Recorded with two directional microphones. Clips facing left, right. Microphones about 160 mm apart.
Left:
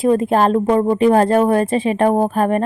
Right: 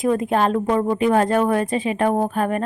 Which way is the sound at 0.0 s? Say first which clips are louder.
Left 4 dB; 35° left (ahead or behind).